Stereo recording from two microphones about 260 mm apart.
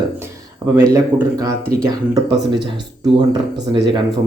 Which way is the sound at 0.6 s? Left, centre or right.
Centre.